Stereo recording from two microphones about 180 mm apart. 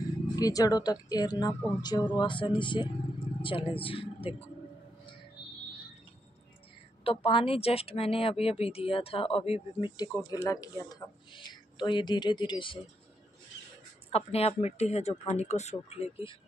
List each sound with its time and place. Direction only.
0.4 s speech: 20° left (ahead or behind)
7.1 s a woman's voice: 30° left (ahead or behind)
14.1 s speech: 35° left (ahead or behind)